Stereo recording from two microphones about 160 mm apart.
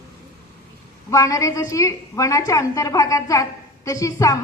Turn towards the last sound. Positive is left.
turn(degrees=20)  # may be behind; listen again after turning